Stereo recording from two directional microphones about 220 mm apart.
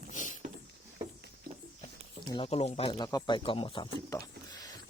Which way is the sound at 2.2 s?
25° left (ahead or behind).